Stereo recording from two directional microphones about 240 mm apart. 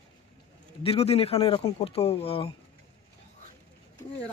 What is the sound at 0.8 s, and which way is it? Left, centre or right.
Speech, left.